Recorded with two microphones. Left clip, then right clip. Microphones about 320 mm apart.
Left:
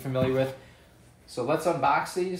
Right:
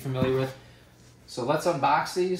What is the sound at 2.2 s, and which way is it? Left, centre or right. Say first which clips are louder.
Speech: right 3 dB; centre.